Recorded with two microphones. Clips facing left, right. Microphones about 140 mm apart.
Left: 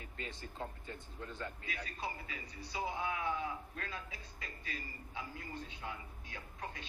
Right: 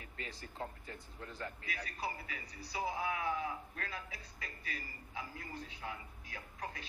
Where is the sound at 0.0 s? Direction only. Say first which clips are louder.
Left 2 dB; 30° left (ahead or behind).